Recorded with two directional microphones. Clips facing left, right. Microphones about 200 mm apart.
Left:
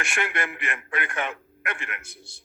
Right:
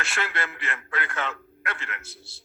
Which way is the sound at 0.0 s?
15° left (ahead or behind).